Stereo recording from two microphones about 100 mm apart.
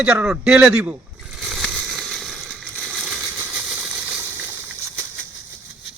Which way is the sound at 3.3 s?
20° right (ahead or behind).